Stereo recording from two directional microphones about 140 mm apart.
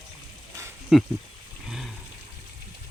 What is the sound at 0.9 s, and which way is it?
Speech, centre (ahead or behind).